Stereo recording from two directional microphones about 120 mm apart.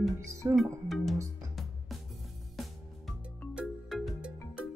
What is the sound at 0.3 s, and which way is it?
Speech, 25° right (ahead or behind).